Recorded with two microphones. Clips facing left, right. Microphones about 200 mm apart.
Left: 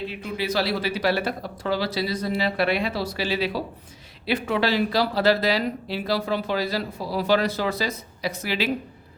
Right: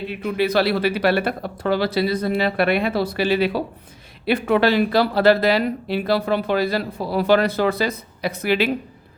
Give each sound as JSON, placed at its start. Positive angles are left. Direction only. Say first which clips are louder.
{"t": 0.1, "sound": "speech", "louder": "right 7 dB", "side_deg": -60}